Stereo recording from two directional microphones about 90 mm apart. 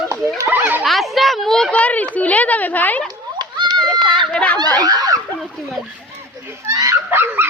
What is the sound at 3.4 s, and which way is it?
Children playing, 55° right (ahead or behind).